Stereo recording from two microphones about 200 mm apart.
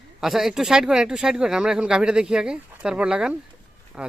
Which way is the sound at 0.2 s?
Centre (ahead or behind).